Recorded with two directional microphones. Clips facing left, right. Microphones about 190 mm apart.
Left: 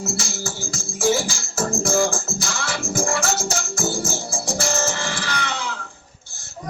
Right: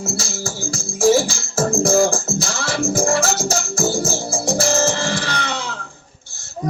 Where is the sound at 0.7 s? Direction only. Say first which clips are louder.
Right 6 dB; 30° right (ahead or behind).